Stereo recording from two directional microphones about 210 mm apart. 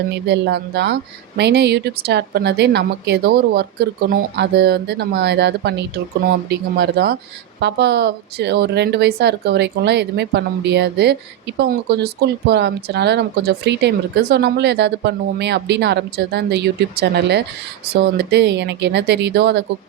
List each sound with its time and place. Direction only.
0.1 s speech: 55° right (ahead or behind)